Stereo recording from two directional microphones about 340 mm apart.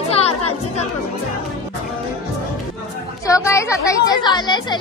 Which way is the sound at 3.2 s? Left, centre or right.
Centre.